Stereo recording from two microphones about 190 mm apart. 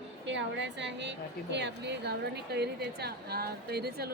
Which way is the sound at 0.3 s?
70° right (ahead or behind).